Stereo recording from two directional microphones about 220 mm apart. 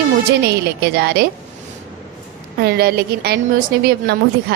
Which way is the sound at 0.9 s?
45° right (ahead or behind).